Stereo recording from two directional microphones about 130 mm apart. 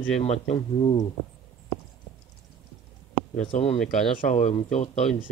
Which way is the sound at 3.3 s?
55° left (ahead or behind).